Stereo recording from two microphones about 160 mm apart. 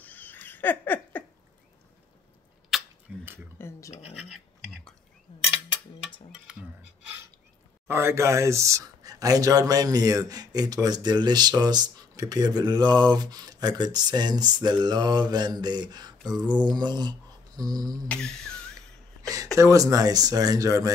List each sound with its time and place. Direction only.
0.0 s a sound: 10° left (ahead or behind)
2.7 s a sound: centre (ahead or behind)
3.1 s speech: 5° right (ahead or behind)
3.5 s speech: 15° left (ahead or behind)
6.5 s humming: 5° right (ahead or behind)
7.9 s speech: 15° right (ahead or behind)
16.6 s a sound: 25° right (ahead or behind)
18.0 s humming: 5° left (ahead or behind)
18.8 s speech: 20° right (ahead or behind)